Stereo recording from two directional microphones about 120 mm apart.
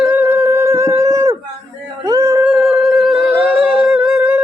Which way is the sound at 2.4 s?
5° right (ahead or behind).